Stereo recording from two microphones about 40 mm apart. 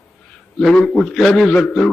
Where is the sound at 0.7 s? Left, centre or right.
Left.